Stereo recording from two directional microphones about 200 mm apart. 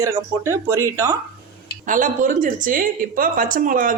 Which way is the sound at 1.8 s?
40° right (ahead or behind).